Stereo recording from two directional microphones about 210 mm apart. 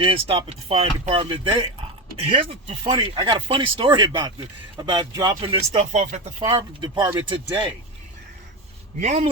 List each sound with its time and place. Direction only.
0.0 s speech: 25° right (ahead or behind)
6.4 s speech: 20° right (ahead or behind)
9.0 s speech: 30° right (ahead or behind)